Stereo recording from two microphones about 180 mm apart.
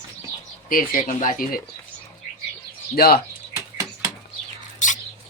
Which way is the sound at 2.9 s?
55° left (ahead or behind).